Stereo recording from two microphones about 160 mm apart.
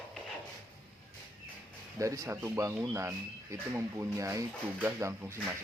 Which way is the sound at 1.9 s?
20° right (ahead or behind).